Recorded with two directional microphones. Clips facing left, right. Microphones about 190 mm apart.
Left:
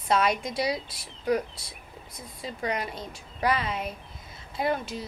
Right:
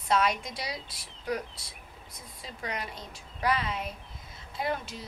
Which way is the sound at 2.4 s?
5° left (ahead or behind).